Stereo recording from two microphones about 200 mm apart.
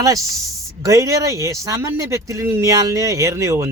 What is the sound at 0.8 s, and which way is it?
Speech, 15° right (ahead or behind).